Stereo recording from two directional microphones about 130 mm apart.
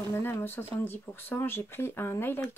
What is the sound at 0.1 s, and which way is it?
Speech, 15° left (ahead or behind).